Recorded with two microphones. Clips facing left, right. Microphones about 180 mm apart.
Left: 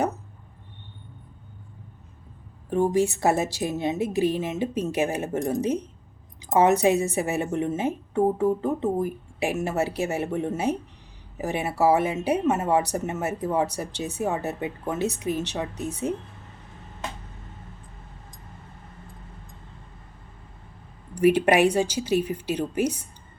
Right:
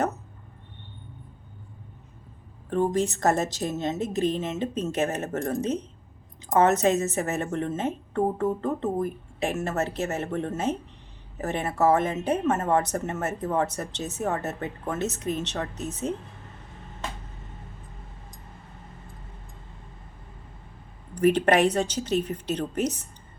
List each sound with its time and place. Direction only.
2.6 s a woman's voice: 10° left (ahead or behind)
21.2 s a woman's voice: 10° left (ahead or behind)